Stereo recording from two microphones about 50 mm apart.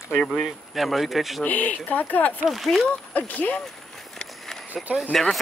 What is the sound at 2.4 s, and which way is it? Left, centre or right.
Speech, centre.